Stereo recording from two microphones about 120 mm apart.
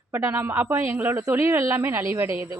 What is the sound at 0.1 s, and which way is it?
Speech, 15° right (ahead or behind).